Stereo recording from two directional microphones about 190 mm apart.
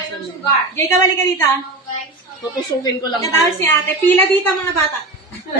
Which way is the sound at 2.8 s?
20° left (ahead or behind).